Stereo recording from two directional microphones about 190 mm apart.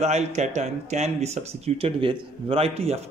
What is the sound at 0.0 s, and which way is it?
A man's voice, 35° right (ahead or behind).